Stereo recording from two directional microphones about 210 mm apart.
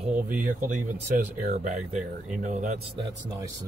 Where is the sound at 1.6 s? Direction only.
35° right (ahead or behind).